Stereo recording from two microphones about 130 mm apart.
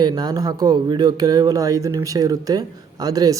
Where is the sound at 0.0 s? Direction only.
30° right (ahead or behind).